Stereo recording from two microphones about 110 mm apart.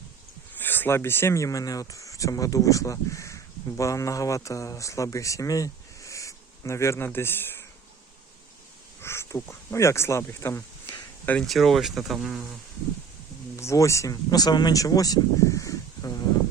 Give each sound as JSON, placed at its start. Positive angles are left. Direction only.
{"t": 0.5, "sound": "speech", "side_deg": 20}
{"t": 9.0, "sound": "speech", "side_deg": 25}
{"t": 11.4, "sound": "speech", "side_deg": 0}
{"t": 13.6, "sound": "speech", "side_deg": 25}